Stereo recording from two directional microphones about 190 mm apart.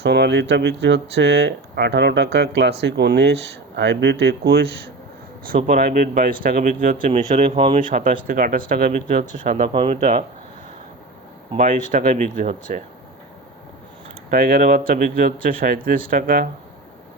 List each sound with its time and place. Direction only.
0.0 s speech: 65° right (ahead or behind)
5.5 s speech: 45° right (ahead or behind)
7.1 s speech: 30° right (ahead or behind)
7.8 s speech: 45° right (ahead or behind)
9.6 s speech: 25° right (ahead or behind)
11.5 s speech: 40° right (ahead or behind)
14.3 s speech: 50° right (ahead or behind)